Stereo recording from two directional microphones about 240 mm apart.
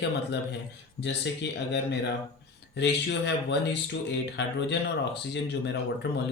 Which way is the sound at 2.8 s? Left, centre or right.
Left.